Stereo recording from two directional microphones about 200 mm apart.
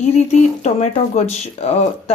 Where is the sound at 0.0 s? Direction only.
35° left (ahead or behind).